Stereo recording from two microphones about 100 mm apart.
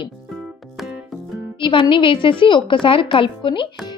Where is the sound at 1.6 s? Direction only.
55° left (ahead or behind).